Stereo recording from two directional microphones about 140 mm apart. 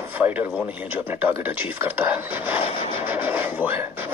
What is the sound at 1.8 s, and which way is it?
Speech, 15° right (ahead or behind).